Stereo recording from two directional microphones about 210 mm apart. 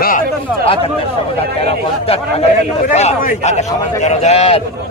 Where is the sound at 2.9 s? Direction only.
35° left (ahead or behind).